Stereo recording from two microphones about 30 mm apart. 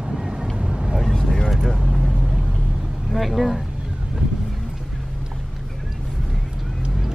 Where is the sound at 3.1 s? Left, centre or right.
Centre.